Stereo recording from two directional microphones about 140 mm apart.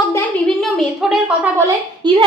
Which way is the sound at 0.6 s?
Centre (ahead or behind).